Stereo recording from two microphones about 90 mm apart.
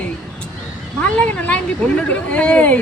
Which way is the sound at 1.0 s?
15° left (ahead or behind).